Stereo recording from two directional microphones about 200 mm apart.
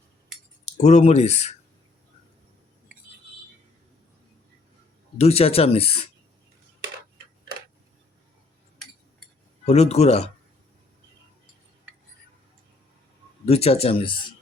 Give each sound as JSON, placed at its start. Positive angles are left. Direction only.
{"t": 0.6, "sound": "speech", "side_deg": 35}
{"t": 5.1, "sound": "speech", "side_deg": 30}
{"t": 9.6, "sound": "speech", "side_deg": 30}
{"t": 13.4, "sound": "speech", "side_deg": 30}